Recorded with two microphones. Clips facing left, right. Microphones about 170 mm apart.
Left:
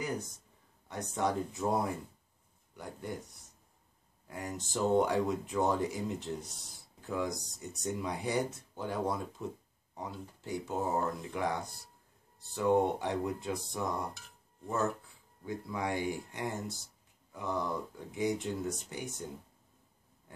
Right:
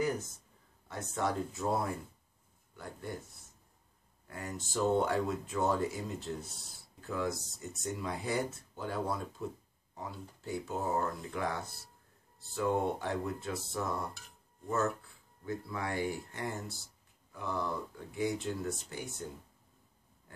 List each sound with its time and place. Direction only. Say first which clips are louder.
0.8 s speech: left 1 dB; 15° left (ahead or behind)
7.6 s speech: left 1 dB; centre (ahead or behind)
8.0 s speech: left 1 dB; 20° left (ahead or behind)
15.4 s speech: left 2 dB; 15° left (ahead or behind)